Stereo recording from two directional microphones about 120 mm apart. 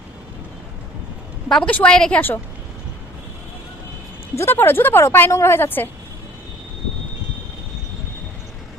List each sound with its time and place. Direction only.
1.5 s a woman's voice: 5° left (ahead or behind)
4.4 s a woman's voice: 20° left (ahead or behind)